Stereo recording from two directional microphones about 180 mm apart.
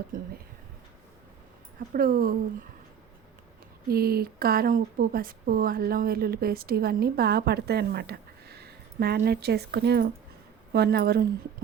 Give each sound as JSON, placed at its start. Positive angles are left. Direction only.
{"t": 0.1, "sound": "speech", "side_deg": -45}
{"t": 1.9, "sound": "speech", "side_deg": -55}
{"t": 3.8, "sound": "a woman's voice", "side_deg": -60}